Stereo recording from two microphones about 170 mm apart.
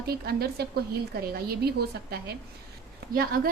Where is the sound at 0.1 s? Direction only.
65° right (ahead or behind).